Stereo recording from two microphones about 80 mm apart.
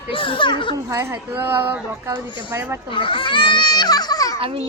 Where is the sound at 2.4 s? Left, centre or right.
Right.